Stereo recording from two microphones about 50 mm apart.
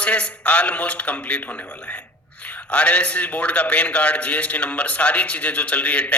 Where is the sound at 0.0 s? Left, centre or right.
Left.